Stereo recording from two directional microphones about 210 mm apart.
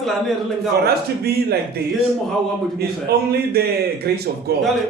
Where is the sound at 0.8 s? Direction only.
50° right (ahead or behind).